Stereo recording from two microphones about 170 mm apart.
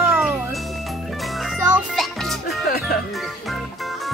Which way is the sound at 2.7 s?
60° left (ahead or behind).